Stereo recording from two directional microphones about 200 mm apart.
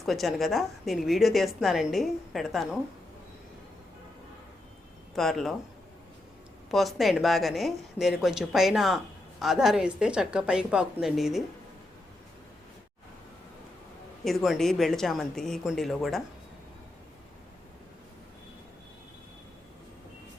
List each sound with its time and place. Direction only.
0.0 s a woman's voice: centre (ahead or behind)
5.1 s a woman's voice: centre (ahead or behind)
6.7 s a woman's voice: centre (ahead or behind)
14.3 s a woman's voice: centre (ahead or behind)